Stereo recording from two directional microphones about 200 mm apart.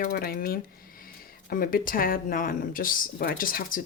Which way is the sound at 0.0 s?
50° left (ahead or behind).